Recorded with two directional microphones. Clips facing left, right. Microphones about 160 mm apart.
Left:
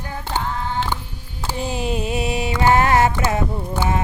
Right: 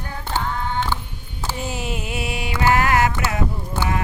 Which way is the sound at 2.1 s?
25° left (ahead or behind).